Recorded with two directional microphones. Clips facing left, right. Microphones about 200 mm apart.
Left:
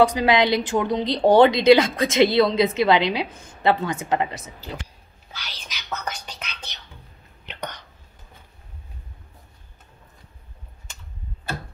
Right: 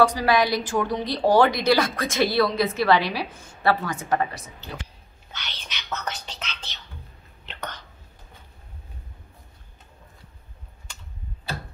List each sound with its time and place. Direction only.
0.0 s speech: 20° left (ahead or behind)
5.3 s whispering: 5° left (ahead or behind)